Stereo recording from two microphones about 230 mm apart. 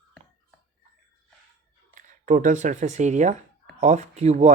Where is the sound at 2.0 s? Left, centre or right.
Right.